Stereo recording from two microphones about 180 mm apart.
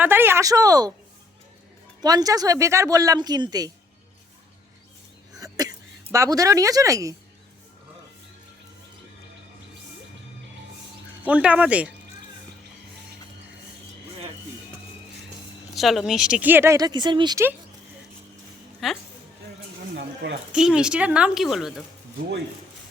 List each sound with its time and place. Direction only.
0.0 s speech: 10° right (ahead or behind)
2.0 s speech: 20° right (ahead or behind)
5.4 s speech: 20° right (ahead or behind)
11.2 s speech: 10° right (ahead or behind)
15.7 s speech: centre (ahead or behind); by 17.4 s 25° right (ahead or behind)
18.8 s a woman's voice: centre (ahead or behind)
20.0 s speech: 85° right
20.5 s a woman's voice: 5° right (ahead or behind)